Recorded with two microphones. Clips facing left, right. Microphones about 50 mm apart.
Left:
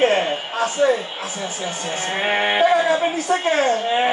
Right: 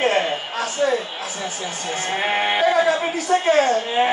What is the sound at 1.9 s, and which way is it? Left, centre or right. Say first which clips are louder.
A man's voice: even; left.